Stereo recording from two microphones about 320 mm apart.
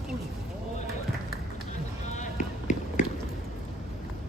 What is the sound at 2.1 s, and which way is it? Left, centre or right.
Run, left.